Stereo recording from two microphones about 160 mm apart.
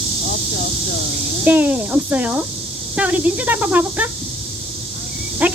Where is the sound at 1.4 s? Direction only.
10° right (ahead or behind).